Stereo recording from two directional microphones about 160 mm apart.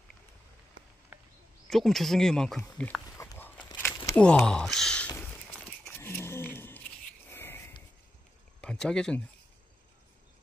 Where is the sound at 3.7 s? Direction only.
10° left (ahead or behind).